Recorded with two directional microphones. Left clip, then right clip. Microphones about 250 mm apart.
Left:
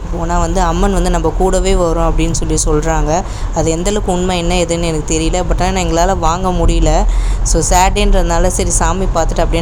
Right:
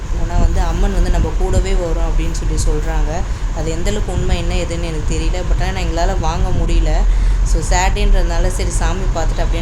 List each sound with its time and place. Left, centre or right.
0.5 s speech: left
3.6 s speech: left
7.5 s speech: left